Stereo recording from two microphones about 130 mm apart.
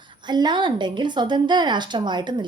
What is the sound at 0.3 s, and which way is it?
A woman's voice, 35° right (ahead or behind).